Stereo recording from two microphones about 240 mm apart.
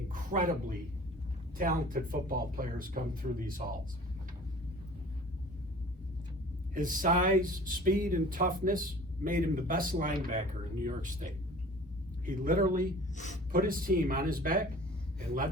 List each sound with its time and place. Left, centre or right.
0.1 s a sound: right
1.5 s speech: right
6.7 s speech: right
13.1 s speech: left
13.5 s speech: right